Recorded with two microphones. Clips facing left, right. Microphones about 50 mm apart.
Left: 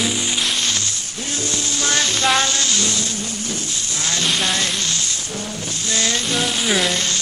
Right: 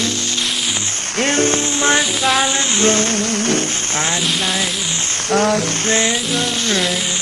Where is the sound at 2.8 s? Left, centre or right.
Right.